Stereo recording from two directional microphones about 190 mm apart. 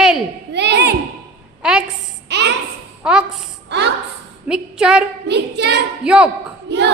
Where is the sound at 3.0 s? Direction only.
5° right (ahead or behind).